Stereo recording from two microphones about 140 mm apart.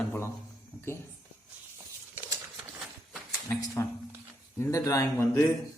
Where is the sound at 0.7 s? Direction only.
25° left (ahead or behind).